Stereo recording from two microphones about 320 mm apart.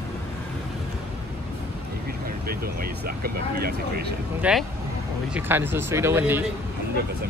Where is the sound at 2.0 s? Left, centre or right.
Right.